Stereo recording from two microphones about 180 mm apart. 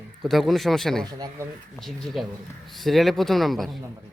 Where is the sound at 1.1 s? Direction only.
20° right (ahead or behind).